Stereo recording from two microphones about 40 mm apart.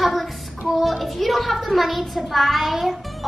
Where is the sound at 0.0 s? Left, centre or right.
Centre.